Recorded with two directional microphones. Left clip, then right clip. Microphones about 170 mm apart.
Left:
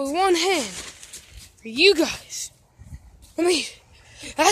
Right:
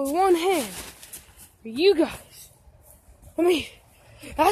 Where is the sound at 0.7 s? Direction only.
45° right (ahead or behind).